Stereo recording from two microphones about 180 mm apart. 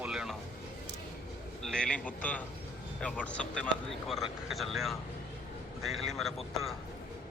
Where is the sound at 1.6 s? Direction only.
5° left (ahead or behind).